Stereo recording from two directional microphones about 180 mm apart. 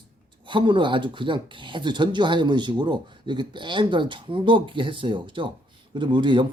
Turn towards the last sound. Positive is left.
turn(degrees=-25)  # may be behind; listen again after turning